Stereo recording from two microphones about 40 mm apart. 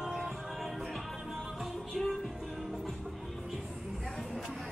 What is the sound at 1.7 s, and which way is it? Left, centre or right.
Music, centre.